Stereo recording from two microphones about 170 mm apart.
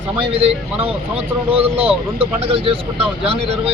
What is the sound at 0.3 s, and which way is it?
Speech, 35° right (ahead or behind).